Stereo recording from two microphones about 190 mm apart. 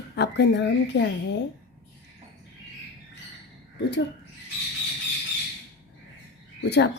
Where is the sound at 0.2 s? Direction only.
65° left (ahead or behind).